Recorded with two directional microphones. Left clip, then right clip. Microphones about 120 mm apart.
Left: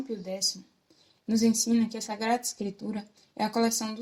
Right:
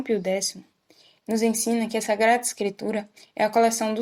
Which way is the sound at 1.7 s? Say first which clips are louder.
Right 6 dB; 55° right (ahead or behind).